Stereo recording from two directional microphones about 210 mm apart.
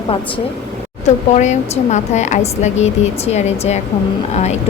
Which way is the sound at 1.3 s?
35° left (ahead or behind).